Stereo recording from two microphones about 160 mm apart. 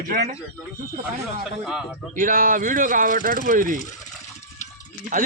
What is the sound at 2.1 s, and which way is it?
Speech, 60° right (ahead or behind).